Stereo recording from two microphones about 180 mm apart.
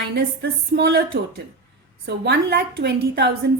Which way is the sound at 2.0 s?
65° right (ahead or behind).